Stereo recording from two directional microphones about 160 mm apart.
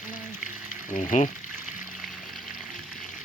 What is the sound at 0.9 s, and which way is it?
Speech, 50° left (ahead or behind).